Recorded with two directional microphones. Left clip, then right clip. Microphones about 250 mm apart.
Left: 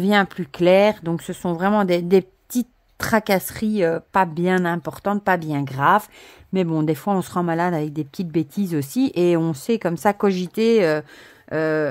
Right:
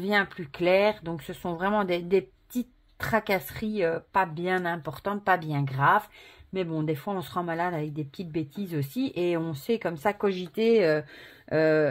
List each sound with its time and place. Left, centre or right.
0.0 s speech: left
11.4 s speech: centre